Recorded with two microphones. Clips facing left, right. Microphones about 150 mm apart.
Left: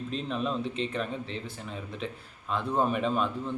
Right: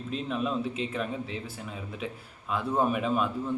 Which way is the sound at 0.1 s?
5° right (ahead or behind).